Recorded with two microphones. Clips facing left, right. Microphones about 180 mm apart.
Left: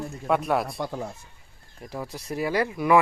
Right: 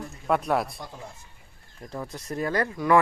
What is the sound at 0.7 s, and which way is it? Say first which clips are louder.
Speech: left 10 dB; 70° left (ahead or behind).